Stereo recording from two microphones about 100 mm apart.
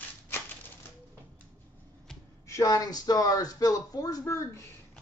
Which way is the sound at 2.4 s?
30° left (ahead or behind).